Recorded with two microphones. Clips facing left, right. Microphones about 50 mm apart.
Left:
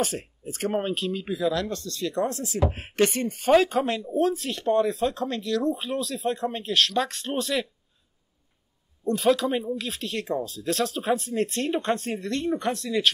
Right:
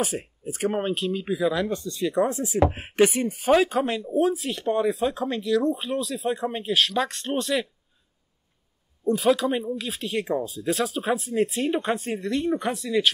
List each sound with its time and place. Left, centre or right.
0.0 s speech: centre
9.0 s speech: centre